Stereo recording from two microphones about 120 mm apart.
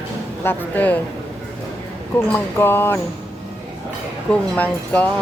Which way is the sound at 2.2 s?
15° left (ahead or behind).